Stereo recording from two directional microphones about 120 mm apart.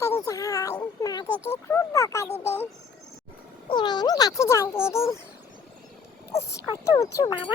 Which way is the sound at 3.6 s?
40° left (ahead or behind).